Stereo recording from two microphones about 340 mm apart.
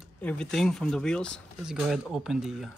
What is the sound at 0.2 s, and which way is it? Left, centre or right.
Speech, centre.